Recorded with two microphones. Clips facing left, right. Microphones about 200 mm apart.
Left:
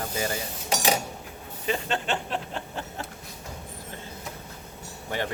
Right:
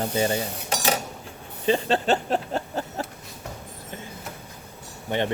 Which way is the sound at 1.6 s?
30° right (ahead or behind).